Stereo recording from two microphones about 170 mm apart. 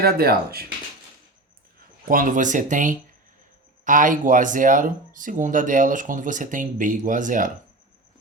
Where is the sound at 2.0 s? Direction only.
55° right (ahead or behind).